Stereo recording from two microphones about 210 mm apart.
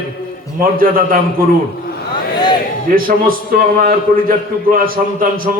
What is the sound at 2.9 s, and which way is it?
A man's voice, 45° right (ahead or behind).